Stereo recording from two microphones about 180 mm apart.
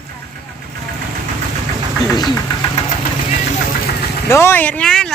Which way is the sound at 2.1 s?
25° left (ahead or behind).